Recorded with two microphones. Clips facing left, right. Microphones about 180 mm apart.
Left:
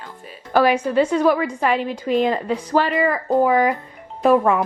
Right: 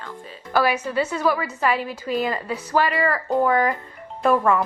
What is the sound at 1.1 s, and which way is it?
Speech, 10° left (ahead or behind).